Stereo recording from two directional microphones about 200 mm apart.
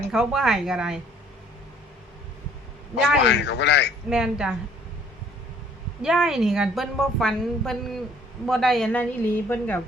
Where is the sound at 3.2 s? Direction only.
60° left (ahead or behind).